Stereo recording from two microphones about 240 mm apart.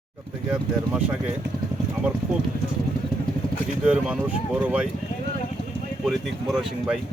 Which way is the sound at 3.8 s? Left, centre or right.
Centre.